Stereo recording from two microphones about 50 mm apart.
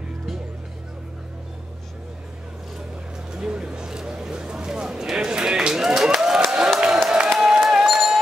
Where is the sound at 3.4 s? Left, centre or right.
Centre.